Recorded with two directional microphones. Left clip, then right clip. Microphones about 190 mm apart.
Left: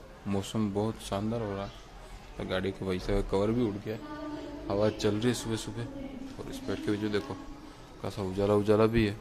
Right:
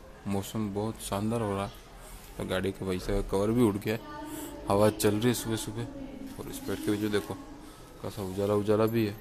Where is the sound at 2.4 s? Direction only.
15° right (ahead or behind).